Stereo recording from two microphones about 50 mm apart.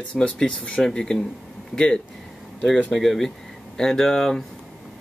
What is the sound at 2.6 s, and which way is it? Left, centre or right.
Speech, centre.